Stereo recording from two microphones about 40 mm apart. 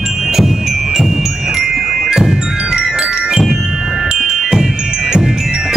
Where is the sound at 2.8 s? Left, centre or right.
Right.